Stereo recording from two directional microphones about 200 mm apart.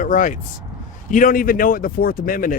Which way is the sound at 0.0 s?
40° left (ahead or behind).